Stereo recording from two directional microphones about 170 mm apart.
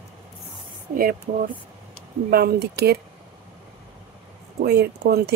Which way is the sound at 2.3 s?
70° right (ahead or behind).